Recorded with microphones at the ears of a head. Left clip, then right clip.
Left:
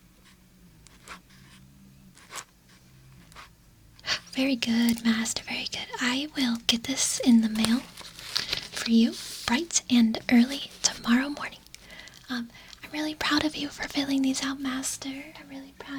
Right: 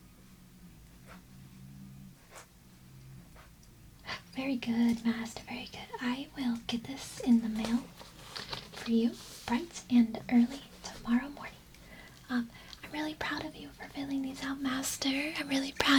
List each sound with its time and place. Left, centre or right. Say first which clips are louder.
4.0 s speech: left 10 dB; left
15.1 s speech: right 8 dB; right